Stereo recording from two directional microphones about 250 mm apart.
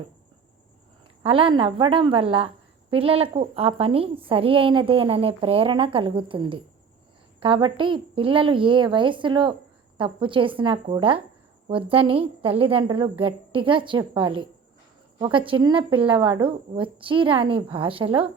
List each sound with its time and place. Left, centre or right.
1.2 s a woman's voice: right